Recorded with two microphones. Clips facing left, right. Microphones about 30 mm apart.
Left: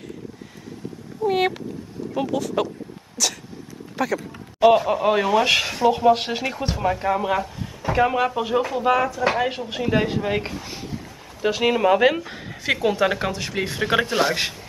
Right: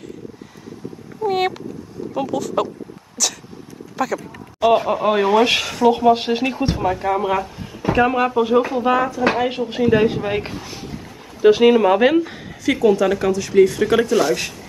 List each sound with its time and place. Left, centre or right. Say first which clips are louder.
1.2 s cat: right 1 dB; centre
2.1 s speech: right 2 dB; centre
3.2 s a sound: right 1 dB; centre
4.8 s speech: right 3 dB; centre
5.6 s speech: right 3 dB; centre
6.5 s speech: right 3 dB; centre
12.8 s speech: right 6 dB; left